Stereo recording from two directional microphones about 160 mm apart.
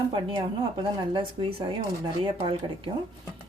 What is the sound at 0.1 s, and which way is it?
Speech, 35° right (ahead or behind).